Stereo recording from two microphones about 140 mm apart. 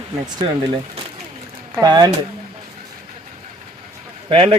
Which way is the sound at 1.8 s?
30° right (ahead or behind).